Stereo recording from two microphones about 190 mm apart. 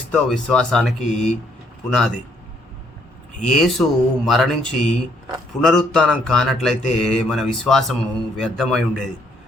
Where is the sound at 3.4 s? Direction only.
Centre (ahead or behind).